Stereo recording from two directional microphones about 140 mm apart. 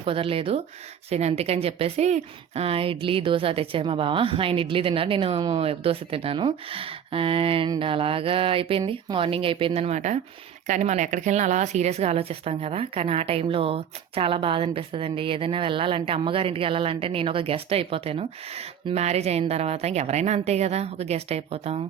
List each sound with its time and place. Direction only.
0.0 s a woman's voice: 40° right (ahead or behind)